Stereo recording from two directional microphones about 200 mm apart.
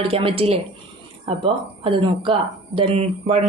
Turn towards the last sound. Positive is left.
turn(degrees=-30)  # may be behind; listen again after turning